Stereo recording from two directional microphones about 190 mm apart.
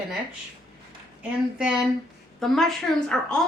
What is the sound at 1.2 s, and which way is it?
A woman's voice, 5° right (ahead or behind).